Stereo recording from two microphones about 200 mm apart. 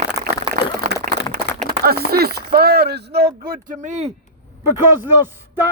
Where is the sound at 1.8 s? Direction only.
50° right (ahead or behind).